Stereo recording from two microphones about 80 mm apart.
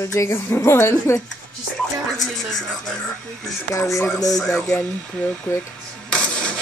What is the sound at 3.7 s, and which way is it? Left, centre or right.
Speech, left.